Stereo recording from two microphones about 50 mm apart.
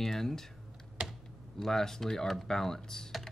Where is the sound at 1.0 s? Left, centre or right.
Centre.